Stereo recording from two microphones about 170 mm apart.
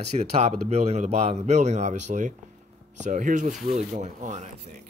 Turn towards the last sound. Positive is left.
turn(degrees=-45)  # may be behind; listen again after turning